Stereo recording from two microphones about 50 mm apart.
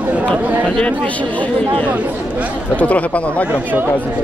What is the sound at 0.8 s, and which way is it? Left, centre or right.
Speech, left.